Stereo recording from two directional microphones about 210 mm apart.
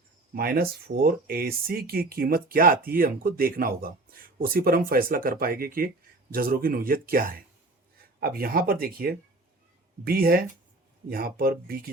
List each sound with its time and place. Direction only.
0.3 s speech: 45° right (ahead or behind)